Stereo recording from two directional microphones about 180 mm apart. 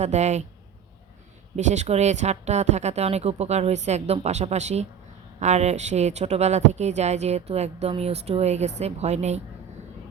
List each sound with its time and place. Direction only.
0.0 s speech: 40° right (ahead or behind)
1.5 s speech: 40° right (ahead or behind)